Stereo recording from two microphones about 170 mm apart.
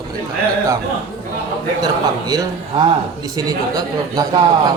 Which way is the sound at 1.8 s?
25° right (ahead or behind).